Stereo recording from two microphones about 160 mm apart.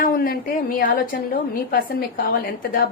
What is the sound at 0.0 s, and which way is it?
A woman's voice, 60° left (ahead or behind).